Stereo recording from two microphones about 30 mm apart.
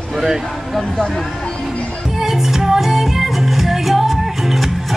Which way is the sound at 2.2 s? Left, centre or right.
Centre.